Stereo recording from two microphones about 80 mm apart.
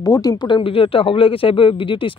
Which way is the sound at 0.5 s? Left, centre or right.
Left.